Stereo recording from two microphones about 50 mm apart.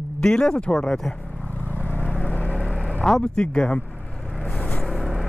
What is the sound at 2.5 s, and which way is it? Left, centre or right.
Vehicle, centre.